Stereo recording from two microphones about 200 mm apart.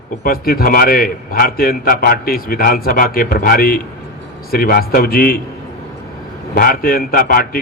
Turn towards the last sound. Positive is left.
turn(degrees=45)  # may be behind; listen again after turning